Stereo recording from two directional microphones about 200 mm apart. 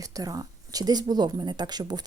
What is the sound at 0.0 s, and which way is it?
Speech, 20° right (ahead or behind).